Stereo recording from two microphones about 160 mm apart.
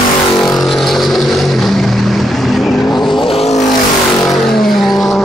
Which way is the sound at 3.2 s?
35° left (ahead or behind).